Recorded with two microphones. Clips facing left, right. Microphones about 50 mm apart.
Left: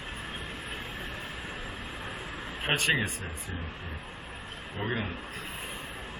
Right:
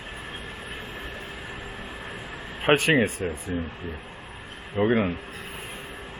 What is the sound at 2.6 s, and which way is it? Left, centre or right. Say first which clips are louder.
Speech: right 7 dB; right.